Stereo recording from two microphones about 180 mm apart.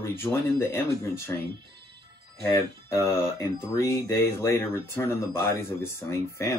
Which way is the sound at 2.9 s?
15° left (ahead or behind).